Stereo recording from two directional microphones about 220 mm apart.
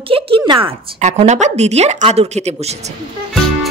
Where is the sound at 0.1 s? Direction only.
25° right (ahead or behind).